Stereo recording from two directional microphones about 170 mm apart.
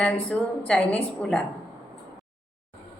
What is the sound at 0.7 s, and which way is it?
Speech, 5° left (ahead or behind).